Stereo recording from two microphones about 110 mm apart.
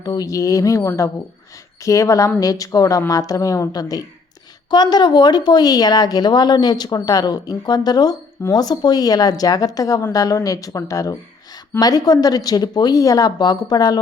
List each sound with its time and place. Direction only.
0.0 s a woman's voice: 35° left (ahead or behind)